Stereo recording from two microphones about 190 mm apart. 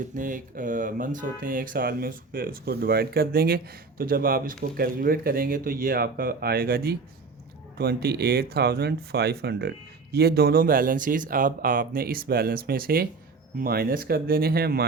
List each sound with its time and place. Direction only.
0.2 s speech: 45° right (ahead or behind)